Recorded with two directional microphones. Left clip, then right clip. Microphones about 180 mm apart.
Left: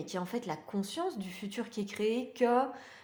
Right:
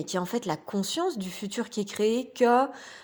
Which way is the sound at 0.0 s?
45° right (ahead or behind).